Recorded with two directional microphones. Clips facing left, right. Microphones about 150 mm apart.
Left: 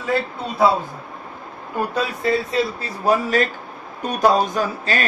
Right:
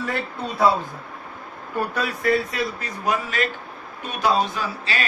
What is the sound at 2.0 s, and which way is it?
A man's voice, 25° left (ahead or behind).